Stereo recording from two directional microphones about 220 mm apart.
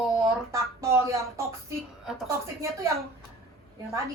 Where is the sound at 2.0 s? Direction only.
Centre (ahead or behind).